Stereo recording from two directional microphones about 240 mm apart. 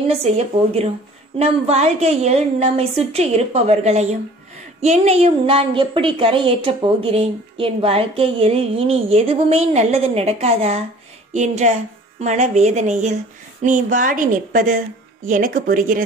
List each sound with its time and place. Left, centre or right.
0.1 s a woman's voice: right